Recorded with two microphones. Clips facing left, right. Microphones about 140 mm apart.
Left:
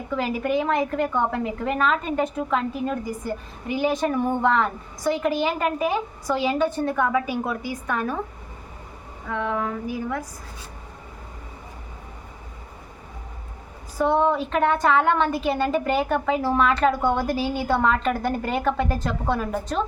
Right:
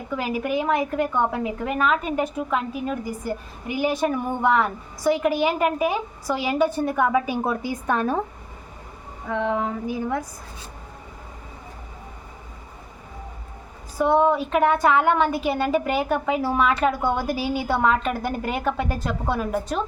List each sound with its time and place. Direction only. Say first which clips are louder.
0.1 s a woman's voice: left 1 dB; 5° right (ahead or behind); by 8.2 s 30° right (ahead or behind)
9.3 s female singing: right 2 dB; 20° right (ahead or behind)
14.0 s a woman's voice: right 2 dB; 5° right (ahead or behind)